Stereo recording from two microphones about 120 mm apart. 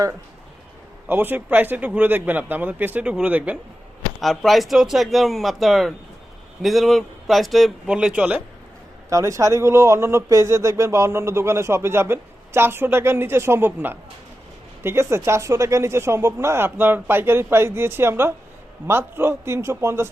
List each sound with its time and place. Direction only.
1.0 s speech: 15° right (ahead or behind)
4.2 s a man's voice: centre (ahead or behind)
9.0 s speech: 25° right (ahead or behind)